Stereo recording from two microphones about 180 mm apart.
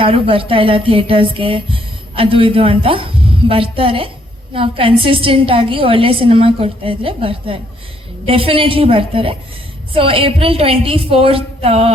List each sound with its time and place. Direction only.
0.0 s speech: 30° right (ahead or behind)